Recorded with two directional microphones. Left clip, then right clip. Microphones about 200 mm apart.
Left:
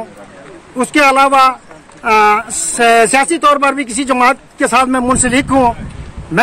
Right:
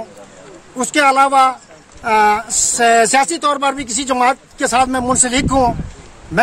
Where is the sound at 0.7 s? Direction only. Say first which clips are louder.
Left 3 dB; 10° right (ahead or behind).